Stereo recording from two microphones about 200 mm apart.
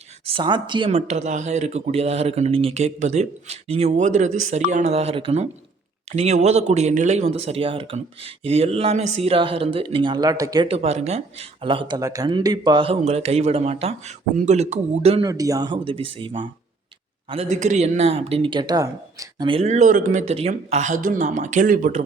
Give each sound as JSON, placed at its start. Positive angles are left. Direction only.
{"t": 0.3, "sound": "speech", "side_deg": -25}
{"t": 15.2, "sound": "speech", "side_deg": -15}